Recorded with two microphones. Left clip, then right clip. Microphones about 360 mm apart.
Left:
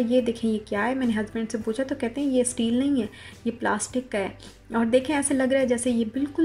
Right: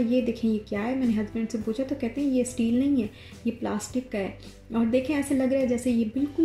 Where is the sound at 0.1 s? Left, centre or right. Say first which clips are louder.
Left 3 dB; left.